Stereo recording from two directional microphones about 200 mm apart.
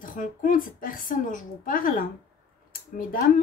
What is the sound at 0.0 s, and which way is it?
Speech, 40° left (ahead or behind).